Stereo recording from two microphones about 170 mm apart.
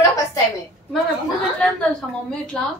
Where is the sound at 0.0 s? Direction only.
20° left (ahead or behind).